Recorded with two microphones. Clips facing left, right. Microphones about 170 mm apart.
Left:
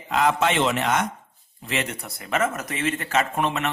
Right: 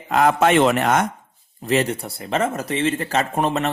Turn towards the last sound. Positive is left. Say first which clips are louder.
# right 3 dB
turn(degrees=-35)  # may be behind; listen again after turning